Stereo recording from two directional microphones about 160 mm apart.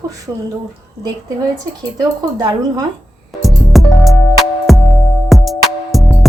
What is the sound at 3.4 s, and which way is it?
Music, centre (ahead or behind).